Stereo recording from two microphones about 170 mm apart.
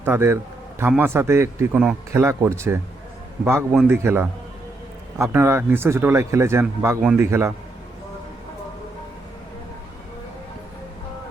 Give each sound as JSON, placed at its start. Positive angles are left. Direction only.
{"t": 0.0, "sound": "speech", "side_deg": -15}